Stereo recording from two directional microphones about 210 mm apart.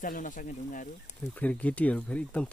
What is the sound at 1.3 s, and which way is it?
Speech, 5° left (ahead or behind).